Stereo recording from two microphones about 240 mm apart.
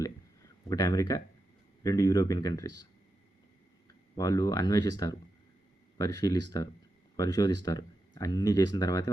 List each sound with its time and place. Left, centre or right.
0.7 s speech: centre
4.2 s speech: centre